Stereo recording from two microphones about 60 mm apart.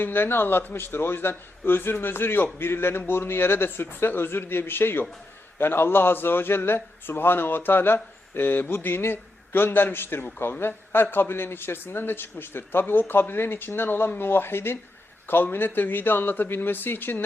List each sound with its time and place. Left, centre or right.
0.0 s a man's voice: left